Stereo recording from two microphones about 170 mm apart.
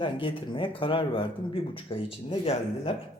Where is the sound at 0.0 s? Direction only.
30° left (ahead or behind).